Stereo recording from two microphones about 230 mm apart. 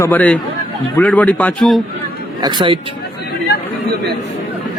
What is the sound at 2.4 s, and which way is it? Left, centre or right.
Speech, centre.